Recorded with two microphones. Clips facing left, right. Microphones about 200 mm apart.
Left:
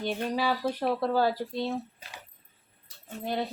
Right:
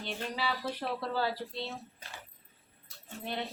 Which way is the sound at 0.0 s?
45° left (ahead or behind).